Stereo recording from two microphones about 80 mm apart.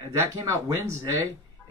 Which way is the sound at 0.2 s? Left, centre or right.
Right.